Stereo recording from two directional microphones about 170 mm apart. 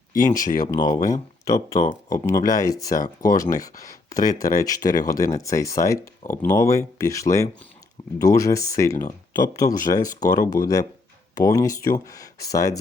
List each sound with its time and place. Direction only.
0.3 s speech: 50° left (ahead or behind)
0.7 s speech: 20° left (ahead or behind)
4.2 s speech: 55° left (ahead or behind)
4.4 s speech: 20° left (ahead or behind)